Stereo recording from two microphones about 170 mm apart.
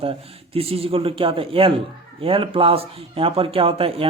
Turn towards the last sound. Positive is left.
turn(degrees=-35)  # may be behind; listen again after turning